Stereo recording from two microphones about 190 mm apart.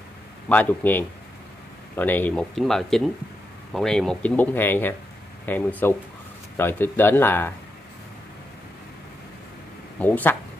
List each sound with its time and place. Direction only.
0.5 s speech: 10° left (ahead or behind)
9.9 s speech: 10° left (ahead or behind)